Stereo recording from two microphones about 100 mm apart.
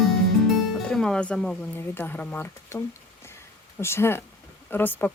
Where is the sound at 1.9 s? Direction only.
20° left (ahead or behind).